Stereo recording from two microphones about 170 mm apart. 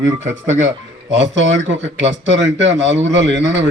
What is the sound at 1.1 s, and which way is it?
Speech, 90° right.